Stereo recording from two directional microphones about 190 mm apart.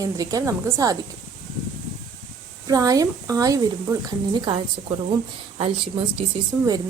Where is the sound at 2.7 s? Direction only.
20° right (ahead or behind).